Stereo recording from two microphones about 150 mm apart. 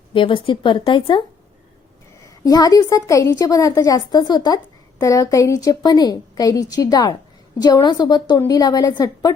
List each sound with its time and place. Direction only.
0.1 s speech: 35° left (ahead or behind)
2.4 s a woman's voice: 25° left (ahead or behind)